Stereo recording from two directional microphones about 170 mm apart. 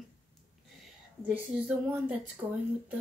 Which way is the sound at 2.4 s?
15° right (ahead or behind).